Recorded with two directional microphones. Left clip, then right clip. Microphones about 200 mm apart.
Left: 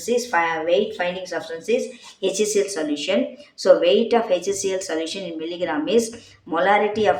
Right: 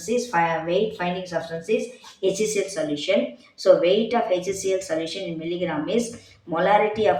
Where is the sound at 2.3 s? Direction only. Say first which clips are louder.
Left 3 dB; 35° left (ahead or behind).